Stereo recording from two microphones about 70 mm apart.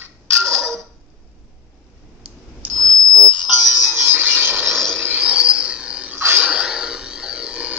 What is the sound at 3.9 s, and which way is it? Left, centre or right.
Music, right.